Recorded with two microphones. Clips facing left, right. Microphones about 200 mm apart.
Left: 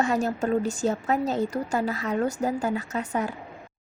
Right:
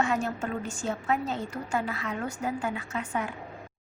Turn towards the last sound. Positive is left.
turn(degrees=40)  # may be behind; listen again after turning